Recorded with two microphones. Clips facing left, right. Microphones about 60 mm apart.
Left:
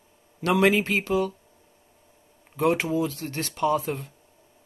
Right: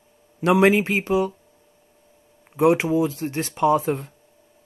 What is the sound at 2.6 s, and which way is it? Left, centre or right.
Speech, centre.